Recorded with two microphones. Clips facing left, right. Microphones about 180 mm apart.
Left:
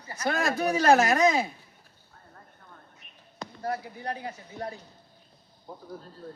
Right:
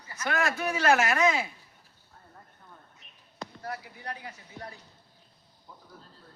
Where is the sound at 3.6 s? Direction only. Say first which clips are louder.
Left 7 dB; 40° left (ahead or behind).